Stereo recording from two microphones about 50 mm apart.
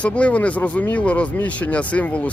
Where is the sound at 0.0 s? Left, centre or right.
Left.